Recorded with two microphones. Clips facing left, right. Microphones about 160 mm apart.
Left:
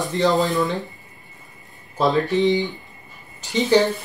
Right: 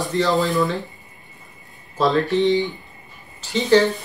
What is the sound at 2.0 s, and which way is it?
A woman's voice, 20° left (ahead or behind).